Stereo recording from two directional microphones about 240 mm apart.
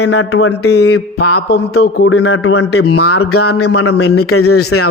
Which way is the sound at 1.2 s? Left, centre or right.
Left.